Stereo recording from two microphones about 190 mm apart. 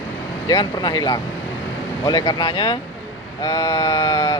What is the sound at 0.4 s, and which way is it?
Speech, 20° left (ahead or behind).